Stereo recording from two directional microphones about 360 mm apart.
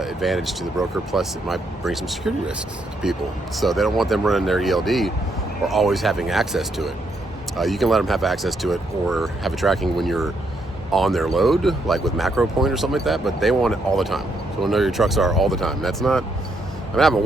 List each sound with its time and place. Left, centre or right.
0.0 s speech: centre
3.6 s speech: centre